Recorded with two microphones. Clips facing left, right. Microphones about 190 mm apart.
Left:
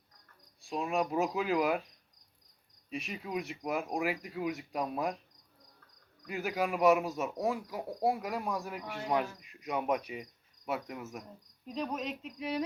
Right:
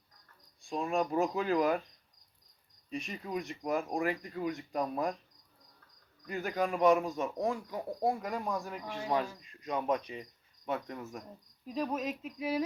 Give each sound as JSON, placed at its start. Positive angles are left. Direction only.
{"t": 0.6, "sound": "speech", "side_deg": 5}
{"t": 2.9, "sound": "speech", "side_deg": 5}
{"t": 6.2, "sound": "speech", "side_deg": 5}
{"t": 11.6, "sound": "speech", "side_deg": -5}